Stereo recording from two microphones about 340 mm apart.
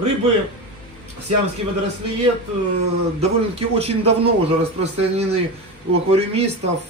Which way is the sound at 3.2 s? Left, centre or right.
Centre.